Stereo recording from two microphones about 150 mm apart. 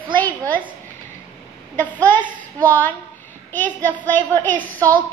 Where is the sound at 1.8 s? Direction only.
10° left (ahead or behind).